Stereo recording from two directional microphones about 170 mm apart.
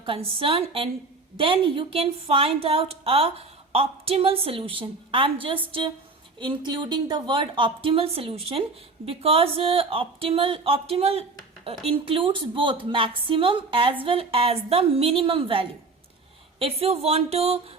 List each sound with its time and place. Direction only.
0.0 s a woman's voice: 30° right (ahead or behind)